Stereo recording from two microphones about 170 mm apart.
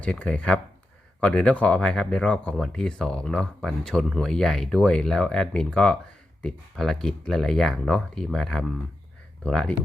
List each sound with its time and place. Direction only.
0.0 s speech: 5° left (ahead or behind)